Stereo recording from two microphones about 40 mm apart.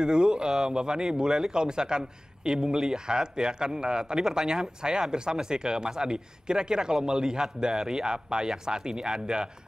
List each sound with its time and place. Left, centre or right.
0.0 s speech: centre